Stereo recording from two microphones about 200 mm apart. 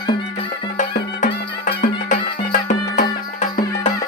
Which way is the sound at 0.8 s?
40° left (ahead or behind).